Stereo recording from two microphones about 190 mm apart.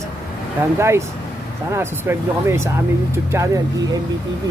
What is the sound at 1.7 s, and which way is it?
Speech, 10° right (ahead or behind).